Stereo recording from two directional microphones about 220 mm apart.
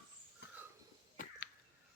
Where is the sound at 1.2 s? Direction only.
40° left (ahead or behind).